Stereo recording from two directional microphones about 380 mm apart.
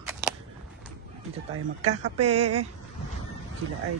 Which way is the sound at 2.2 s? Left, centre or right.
Centre.